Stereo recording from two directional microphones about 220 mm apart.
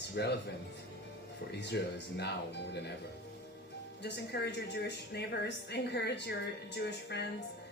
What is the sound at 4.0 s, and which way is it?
A woman's voice, 50° left (ahead or behind).